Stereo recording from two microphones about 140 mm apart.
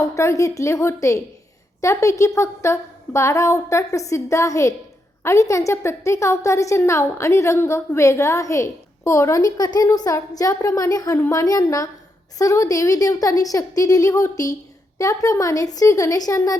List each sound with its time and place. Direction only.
0.0 s a woman's voice: 20° left (ahead or behind)